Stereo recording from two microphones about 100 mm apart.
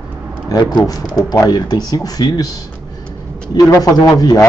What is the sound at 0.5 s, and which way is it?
A man's voice, 40° left (ahead or behind).